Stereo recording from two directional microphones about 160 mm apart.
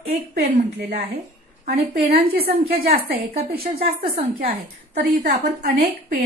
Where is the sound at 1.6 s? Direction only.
35° right (ahead or behind).